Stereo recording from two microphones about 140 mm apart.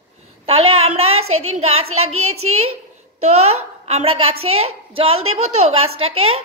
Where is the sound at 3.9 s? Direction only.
45° right (ahead or behind).